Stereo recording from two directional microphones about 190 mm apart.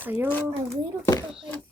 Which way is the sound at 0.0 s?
10° right (ahead or behind).